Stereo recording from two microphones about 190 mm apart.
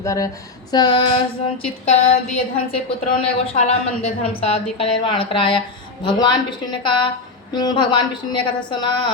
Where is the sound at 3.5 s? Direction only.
35° left (ahead or behind).